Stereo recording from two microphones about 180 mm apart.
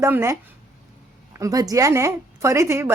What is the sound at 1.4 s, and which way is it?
A woman's voice, 20° right (ahead or behind).